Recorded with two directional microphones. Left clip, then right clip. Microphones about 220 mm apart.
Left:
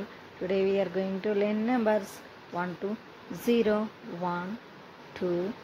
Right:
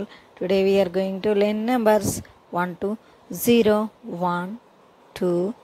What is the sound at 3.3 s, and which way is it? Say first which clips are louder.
Speech: right 8 dB; 40° right (ahead or behind).